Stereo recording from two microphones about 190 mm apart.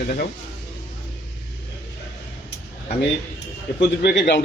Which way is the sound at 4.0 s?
60° left (ahead or behind).